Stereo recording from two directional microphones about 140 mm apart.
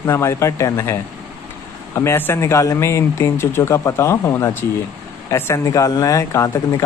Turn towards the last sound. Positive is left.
turn(degrees=25)  # may be behind; listen again after turning